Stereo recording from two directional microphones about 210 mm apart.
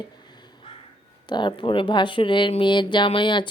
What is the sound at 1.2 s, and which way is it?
A woman's voice, 20° left (ahead or behind).